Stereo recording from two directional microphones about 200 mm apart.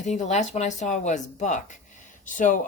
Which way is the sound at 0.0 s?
35° left (ahead or behind).